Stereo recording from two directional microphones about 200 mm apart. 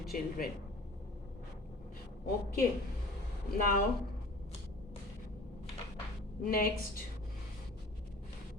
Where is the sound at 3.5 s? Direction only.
45° left (ahead or behind).